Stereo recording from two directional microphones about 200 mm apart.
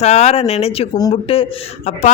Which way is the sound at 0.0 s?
35° left (ahead or behind).